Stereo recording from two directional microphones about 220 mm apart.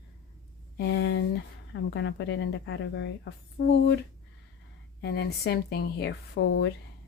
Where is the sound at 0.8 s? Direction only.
55° left (ahead or behind).